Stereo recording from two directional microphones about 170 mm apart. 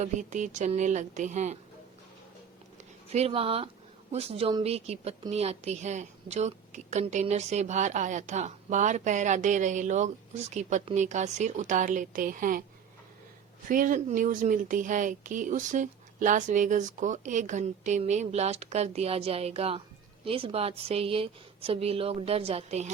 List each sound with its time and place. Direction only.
0.0 s speech: 45° right (ahead or behind)
3.1 s speech: 35° right (ahead or behind); by 12.6 s 55° right (ahead or behind)
13.7 s speech: 50° right (ahead or behind)